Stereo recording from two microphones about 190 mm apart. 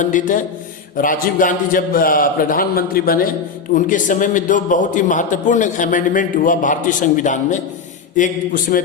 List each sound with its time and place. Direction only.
0.0 s a man's voice: 45° left (ahead or behind)